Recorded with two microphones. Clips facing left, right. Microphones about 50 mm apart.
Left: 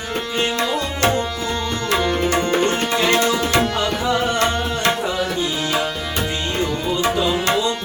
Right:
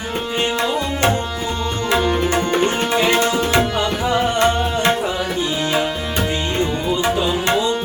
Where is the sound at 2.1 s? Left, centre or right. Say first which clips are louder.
Right 1 dB; centre.